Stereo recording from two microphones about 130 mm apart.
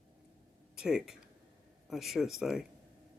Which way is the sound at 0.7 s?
5° right (ahead or behind).